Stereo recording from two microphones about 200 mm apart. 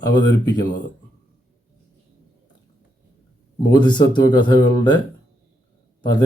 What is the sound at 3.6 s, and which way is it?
Speech, 20° left (ahead or behind).